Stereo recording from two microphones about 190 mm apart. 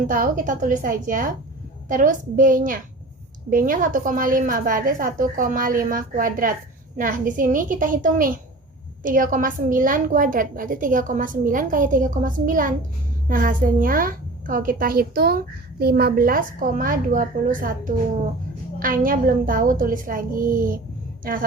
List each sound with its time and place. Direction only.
0.1 s a woman's voice: 45° right (ahead or behind)